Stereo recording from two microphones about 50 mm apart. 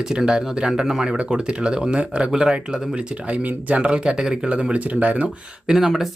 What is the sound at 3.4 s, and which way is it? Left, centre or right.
Speech, right.